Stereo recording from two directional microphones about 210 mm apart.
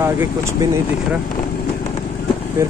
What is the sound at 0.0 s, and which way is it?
Speech, 10° right (ahead or behind).